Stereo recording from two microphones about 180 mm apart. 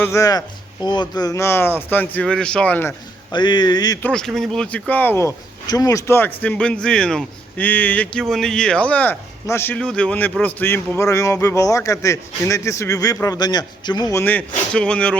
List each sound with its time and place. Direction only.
0.0 s speech: 15° left (ahead or behind)
3.3 s speech: 25° left (ahead or behind)
4.0 s speech: 5° left (ahead or behind)